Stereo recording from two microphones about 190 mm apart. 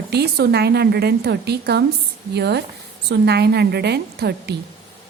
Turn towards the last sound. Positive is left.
turn(degrees=-60)  # may be behind; listen again after turning